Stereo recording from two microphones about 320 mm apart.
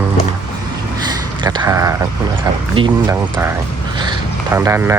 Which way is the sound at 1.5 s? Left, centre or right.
Centre.